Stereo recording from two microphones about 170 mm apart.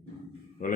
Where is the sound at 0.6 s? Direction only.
50° left (ahead or behind).